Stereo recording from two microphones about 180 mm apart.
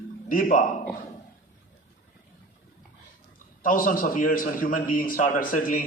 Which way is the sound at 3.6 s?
50° left (ahead or behind).